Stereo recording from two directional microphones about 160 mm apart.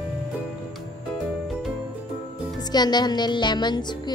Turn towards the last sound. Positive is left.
turn(degrees=25)  # may be behind; listen again after turning